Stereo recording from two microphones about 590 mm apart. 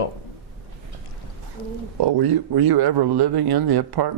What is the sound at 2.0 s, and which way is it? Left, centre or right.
Speech, right.